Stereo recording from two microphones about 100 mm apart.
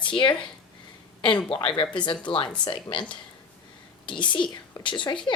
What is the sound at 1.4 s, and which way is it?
Speech, 60° left (ahead or behind).